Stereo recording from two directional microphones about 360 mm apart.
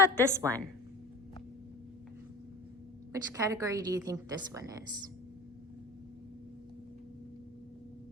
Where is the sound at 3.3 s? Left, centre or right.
Centre.